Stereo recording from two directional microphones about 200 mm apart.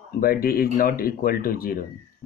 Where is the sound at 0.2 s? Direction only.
45° left (ahead or behind).